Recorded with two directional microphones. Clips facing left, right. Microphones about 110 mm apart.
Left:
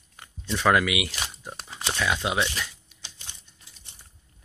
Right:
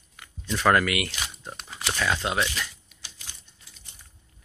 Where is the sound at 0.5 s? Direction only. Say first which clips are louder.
Even; centre (ahead or behind).